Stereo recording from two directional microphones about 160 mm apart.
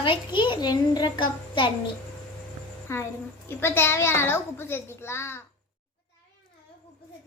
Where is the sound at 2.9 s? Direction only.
20° left (ahead or behind).